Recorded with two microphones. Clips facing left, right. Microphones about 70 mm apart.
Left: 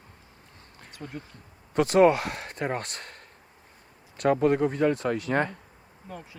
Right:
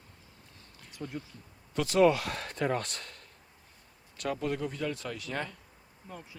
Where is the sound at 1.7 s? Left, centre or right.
Left.